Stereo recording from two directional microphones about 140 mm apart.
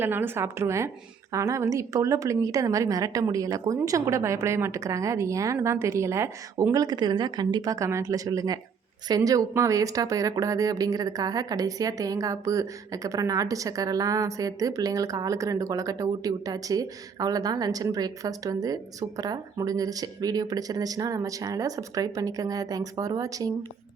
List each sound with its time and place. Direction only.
0.0 s a woman's voice: 15° right (ahead or behind)